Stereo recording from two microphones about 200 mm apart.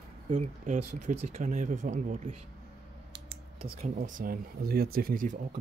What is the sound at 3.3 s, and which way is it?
Typing, 25° right (ahead or behind).